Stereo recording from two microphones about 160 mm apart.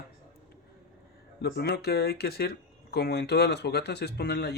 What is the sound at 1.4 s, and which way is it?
Speech, 85° left.